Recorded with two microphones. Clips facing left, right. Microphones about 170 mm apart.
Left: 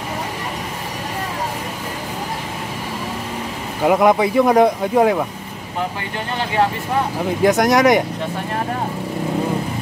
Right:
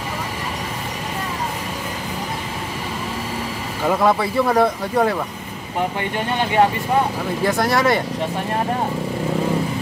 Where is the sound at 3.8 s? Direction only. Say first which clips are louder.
Left 4 dB; 15° left (ahead or behind).